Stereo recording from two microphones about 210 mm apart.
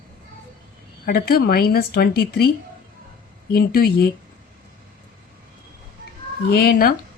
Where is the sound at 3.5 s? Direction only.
45° left (ahead or behind).